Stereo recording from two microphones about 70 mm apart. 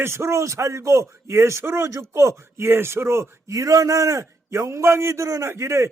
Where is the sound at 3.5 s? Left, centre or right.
Right.